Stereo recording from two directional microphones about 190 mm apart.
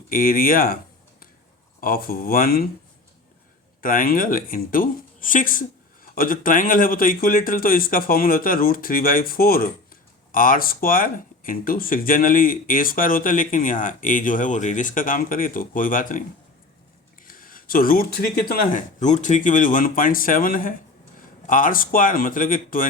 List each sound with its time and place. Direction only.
0.1 s speech: 50° left (ahead or behind)
1.8 s speech: 50° left (ahead or behind)
3.8 s speech: 50° left (ahead or behind)
17.2 s speech: 50° left (ahead or behind)